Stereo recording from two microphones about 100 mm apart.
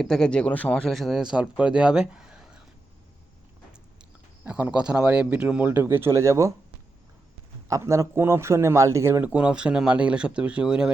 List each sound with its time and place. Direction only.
0.0 s speech: 5° left (ahead or behind)
0.9 s speech: centre (ahead or behind)
4.4 s a man's voice: 10° right (ahead or behind); by 6.5 s 30° right (ahead or behind)
7.7 s a man's voice: 30° right (ahead or behind)
9.3 s speech: 10° right (ahead or behind)